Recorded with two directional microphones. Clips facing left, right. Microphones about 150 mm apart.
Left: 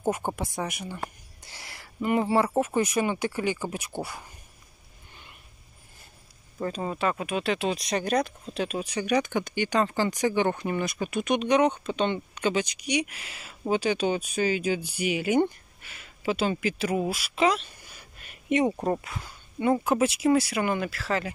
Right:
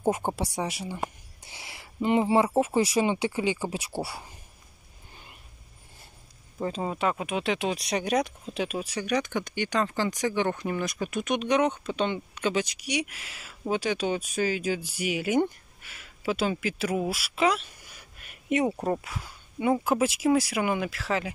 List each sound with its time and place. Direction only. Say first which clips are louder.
0.2 s speech: right 1 dB; 30° right (ahead or behind)
6.6 s speech: even; 15° right (ahead or behind)
18.2 s a sound: left 2 dB; 5° right (ahead or behind)
18.8 s speech: left 1 dB; 10° left (ahead or behind)
19.0 s speech: even; 5° right (ahead or behind)